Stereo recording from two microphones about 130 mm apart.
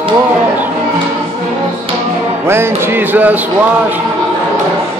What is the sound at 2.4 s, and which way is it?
Speech, 20° right (ahead or behind).